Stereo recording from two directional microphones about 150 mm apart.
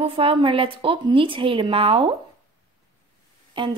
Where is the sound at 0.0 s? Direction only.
35° right (ahead or behind).